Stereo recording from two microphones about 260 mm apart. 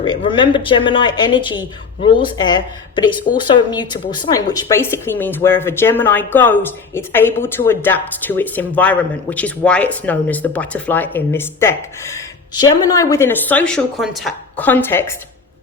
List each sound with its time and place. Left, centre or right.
0.0 s speech: centre